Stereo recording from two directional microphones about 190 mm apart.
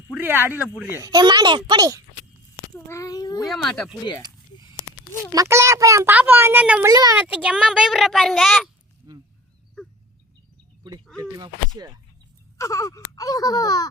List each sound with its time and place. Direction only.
0.2 s a child's voice: 10° right (ahead or behind)
2.7 s a sound: 15° left (ahead or behind)
3.4 s a child's voice: centre (ahead or behind)
5.3 s a child's voice: 15° right (ahead or behind); by 8.7 s centre (ahead or behind)
9.1 s goose: 20° right (ahead or behind)
11.2 s a sound: 20° right (ahead or behind)
12.5 s speech: 15° left (ahead or behind)